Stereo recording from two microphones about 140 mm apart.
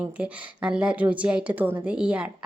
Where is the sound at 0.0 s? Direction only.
10° right (ahead or behind).